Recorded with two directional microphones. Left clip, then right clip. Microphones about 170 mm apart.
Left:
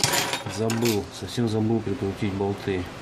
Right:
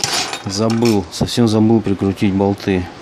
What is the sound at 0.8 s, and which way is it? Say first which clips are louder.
Speech: right 9 dB; 60° right (ahead or behind).